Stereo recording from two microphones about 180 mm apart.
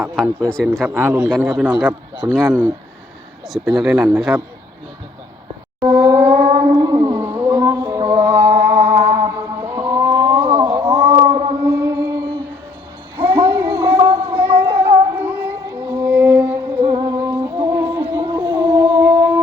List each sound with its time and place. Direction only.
0.2 s speech: centre (ahead or behind)
0.9 s a man's voice: 15° right (ahead or behind)
5.8 s a sound: 25° right (ahead or behind)
10.8 s a sound: 30° right (ahead or behind)
11.8 s music: 15° right (ahead or behind)
13.1 s child singing: 15° right (ahead or behind)
15.1 s music: 15° right (ahead or behind)